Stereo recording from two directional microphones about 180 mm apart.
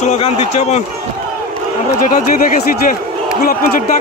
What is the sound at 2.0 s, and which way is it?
Speech, 50° left (ahead or behind).